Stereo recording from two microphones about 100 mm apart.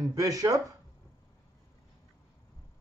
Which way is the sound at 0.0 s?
35° right (ahead or behind).